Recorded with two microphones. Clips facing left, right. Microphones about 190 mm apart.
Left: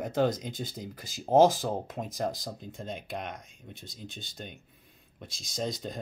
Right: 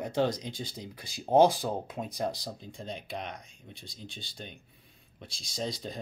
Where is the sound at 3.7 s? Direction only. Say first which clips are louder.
Left 2 dB; 50° left (ahead or behind).